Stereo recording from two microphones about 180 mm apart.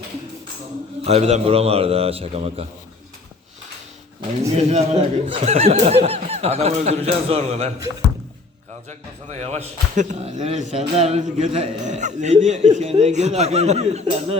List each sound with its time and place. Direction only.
1.0 s speech: 35° right (ahead or behind)
4.5 s speech: 35° right (ahead or behind)
8.9 s speech: 40° right (ahead or behind)